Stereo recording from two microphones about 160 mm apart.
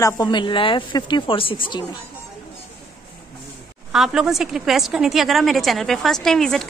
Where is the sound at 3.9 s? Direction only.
5° right (ahead or behind).